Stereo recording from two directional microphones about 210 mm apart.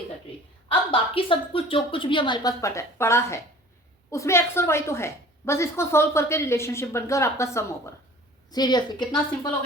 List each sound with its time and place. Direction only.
0.7 s a woman's voice: 25° left (ahead or behind)